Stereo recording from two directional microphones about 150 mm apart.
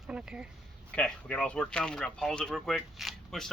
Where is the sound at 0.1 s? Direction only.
5° right (ahead or behind).